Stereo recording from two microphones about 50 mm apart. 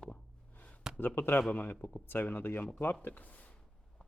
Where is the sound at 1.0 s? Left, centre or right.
Left.